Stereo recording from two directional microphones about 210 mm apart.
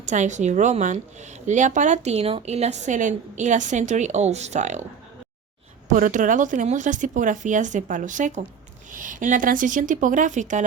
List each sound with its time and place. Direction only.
0.0 s speech: 35° right (ahead or behind)
5.9 s speech: 40° right (ahead or behind)